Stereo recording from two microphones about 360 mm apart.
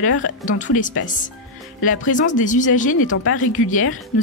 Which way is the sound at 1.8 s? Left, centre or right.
Left.